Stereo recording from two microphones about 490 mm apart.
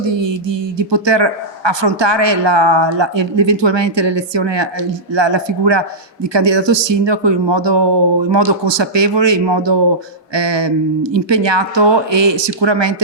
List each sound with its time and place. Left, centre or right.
0.1 s speech: right